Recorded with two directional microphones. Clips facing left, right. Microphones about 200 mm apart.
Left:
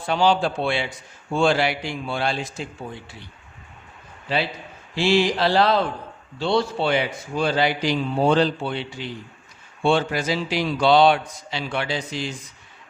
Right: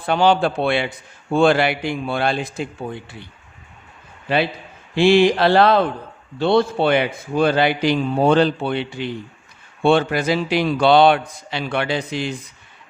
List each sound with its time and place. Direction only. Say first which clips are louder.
0.0 s a man's voice: right 3 dB; 60° right (ahead or behind)
4.3 s a man's voice: right 5 dB; 60° right (ahead or behind)